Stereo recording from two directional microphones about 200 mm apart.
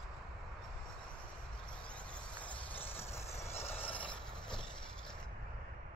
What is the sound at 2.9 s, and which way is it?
Vehicle, 15° left (ahead or behind).